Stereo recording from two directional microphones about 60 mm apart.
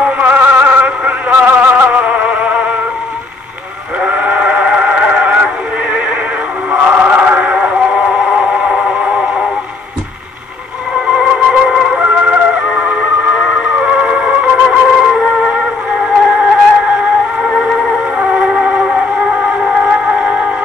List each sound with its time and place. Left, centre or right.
0.0 s a sound: right
4.0 s sheep: right
6.7 s synthetic singing: right
11.1 s music: centre
15.0 s music: centre
18.1 s a sound: centre
19.3 s music: centre